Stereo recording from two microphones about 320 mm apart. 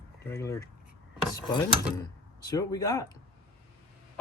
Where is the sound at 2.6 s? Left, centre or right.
Centre.